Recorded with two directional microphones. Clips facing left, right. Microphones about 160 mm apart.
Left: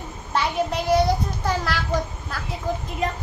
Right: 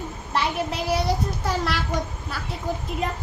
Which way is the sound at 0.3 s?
Centre (ahead or behind).